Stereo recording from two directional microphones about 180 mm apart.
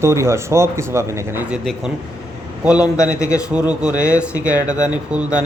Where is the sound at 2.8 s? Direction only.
15° left (ahead or behind).